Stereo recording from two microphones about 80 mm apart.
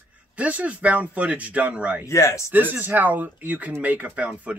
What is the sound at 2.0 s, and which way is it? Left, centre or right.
Speech, left.